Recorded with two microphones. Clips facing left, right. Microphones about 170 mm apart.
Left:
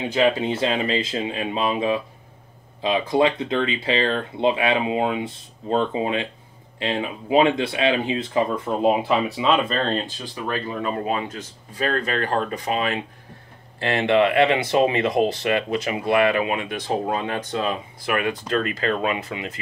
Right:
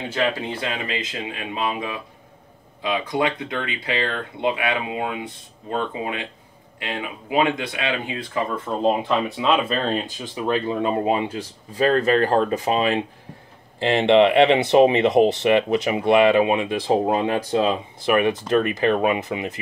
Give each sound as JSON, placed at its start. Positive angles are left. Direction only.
{"t": 0.1, "sound": "speech", "side_deg": 20}
{"t": 8.6, "sound": "speech", "side_deg": 10}
{"t": 13.8, "sound": "speech", "side_deg": -25}